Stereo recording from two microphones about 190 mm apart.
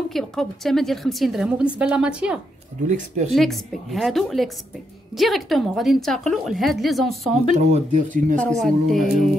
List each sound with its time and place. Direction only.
0.1 s a woman's voice: centre (ahead or behind)
2.9 s speech: 40° right (ahead or behind)
3.3 s a woman's voice: centre (ahead or behind)
7.5 s speech: 40° right (ahead or behind)
8.4 s a woman's voice: 5° left (ahead or behind)